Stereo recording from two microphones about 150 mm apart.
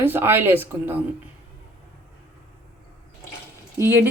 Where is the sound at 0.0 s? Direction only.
15° right (ahead or behind).